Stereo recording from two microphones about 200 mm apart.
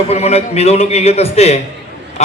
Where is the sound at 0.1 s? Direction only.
30° left (ahead or behind).